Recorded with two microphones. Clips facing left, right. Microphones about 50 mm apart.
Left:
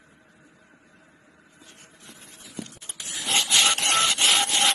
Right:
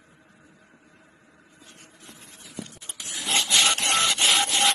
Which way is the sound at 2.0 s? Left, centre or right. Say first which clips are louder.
Even; right.